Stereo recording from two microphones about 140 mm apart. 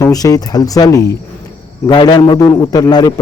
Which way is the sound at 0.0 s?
25° left (ahead or behind).